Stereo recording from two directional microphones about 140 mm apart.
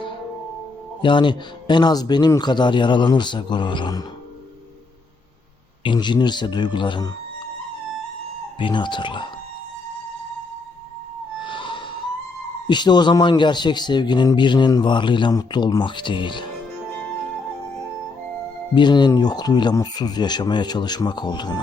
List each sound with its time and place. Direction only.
1.0 s a man's voice: 35° left (ahead or behind)
5.8 s a man's voice: 35° left (ahead or behind)
8.5 s a man's voice: 35° left (ahead or behind)
11.4 s a sound: 35° left (ahead or behind)
12.6 s a man's voice: 30° left (ahead or behind)
18.7 s a man's voice: 35° left (ahead or behind)